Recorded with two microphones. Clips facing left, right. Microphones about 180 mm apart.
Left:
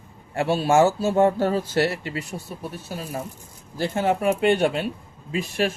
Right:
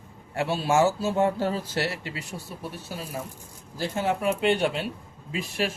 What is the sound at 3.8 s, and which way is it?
Speech, 55° left (ahead or behind).